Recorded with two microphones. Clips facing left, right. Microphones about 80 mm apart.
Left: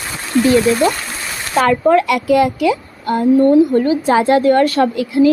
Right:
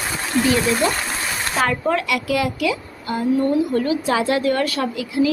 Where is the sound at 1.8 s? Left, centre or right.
Left.